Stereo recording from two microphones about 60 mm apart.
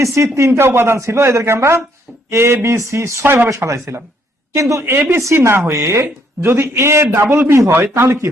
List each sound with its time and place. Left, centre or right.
0.0 s speech: right
4.5 s speech: right
4.8 s speech: right